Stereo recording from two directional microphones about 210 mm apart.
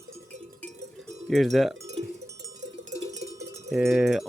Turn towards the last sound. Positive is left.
turn(degrees=0)  # may be behind; listen again after turning